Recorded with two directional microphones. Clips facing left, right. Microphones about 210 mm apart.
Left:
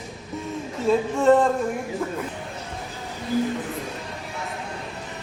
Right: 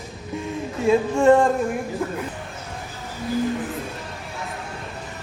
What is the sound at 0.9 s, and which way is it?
Speech, 15° right (ahead or behind).